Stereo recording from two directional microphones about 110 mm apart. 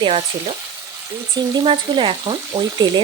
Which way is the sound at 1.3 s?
40° right (ahead or behind).